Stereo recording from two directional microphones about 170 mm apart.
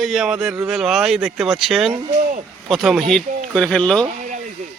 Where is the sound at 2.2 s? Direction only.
45° right (ahead or behind).